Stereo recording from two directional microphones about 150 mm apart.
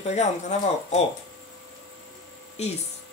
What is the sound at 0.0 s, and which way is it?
A woman's voice, 50° left (ahead or behind).